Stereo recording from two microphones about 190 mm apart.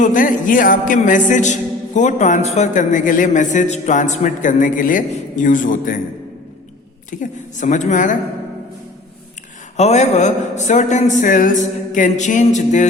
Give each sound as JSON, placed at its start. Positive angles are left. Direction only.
{"t": 0.0, "sound": "music", "side_deg": 45}
{"t": 7.1, "sound": "music", "side_deg": 40}
{"t": 9.7, "sound": "music", "side_deg": 35}